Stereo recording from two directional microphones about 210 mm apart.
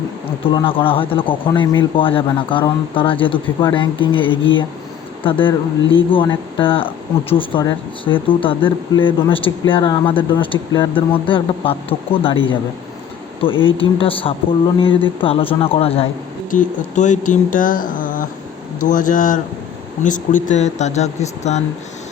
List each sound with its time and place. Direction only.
0.4 s speech: 25° left (ahead or behind)
5.8 s speech: 65° left (ahead or behind)
6.1 s speech: 25° left (ahead or behind)
13.4 s speech: 25° left (ahead or behind)
16.5 s speech: 35° left (ahead or behind)